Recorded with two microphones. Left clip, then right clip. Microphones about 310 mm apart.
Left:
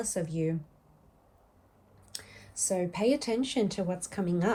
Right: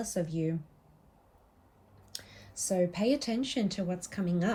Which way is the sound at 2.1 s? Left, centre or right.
Centre.